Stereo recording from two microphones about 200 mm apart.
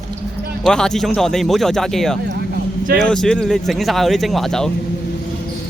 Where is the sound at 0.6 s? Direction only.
5° left (ahead or behind).